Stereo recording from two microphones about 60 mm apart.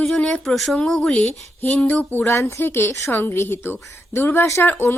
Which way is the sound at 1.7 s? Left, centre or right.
Left.